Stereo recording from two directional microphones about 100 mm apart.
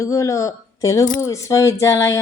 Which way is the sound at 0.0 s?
30° left (ahead or behind).